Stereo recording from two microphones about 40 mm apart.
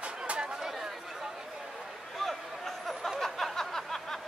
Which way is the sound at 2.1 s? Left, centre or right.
Centre.